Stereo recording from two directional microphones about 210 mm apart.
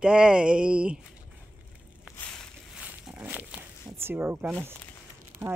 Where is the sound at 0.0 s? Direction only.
5° right (ahead or behind).